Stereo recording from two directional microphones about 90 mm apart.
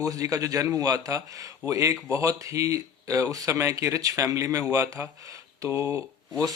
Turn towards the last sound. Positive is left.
turn(degrees=-35)  # may be behind; listen again after turning